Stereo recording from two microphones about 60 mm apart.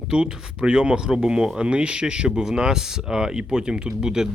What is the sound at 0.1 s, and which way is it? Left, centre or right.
Speech, centre.